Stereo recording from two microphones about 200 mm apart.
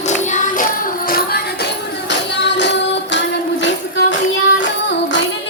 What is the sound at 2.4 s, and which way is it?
Music, 60° left (ahead or behind).